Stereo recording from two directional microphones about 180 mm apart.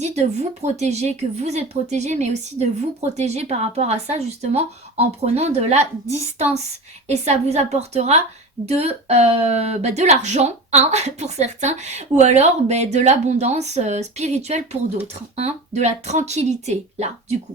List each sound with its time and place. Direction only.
0.0 s speech: 40° right (ahead or behind)